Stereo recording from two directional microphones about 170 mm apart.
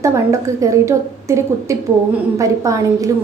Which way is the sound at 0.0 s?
20° right (ahead or behind).